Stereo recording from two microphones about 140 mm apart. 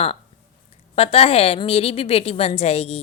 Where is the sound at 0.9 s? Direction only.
45° left (ahead or behind).